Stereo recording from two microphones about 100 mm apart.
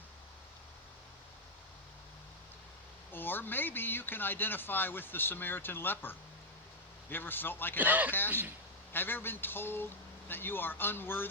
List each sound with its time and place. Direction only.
3.1 s speech: 20° left (ahead or behind)
7.8 s speech: 15° right (ahead or behind)
8.9 s speech: 20° left (ahead or behind)